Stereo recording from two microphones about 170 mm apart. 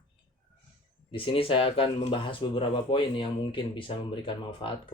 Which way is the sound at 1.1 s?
30° left (ahead or behind).